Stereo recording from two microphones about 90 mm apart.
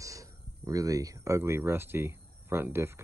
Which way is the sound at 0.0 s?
40° right (ahead or behind).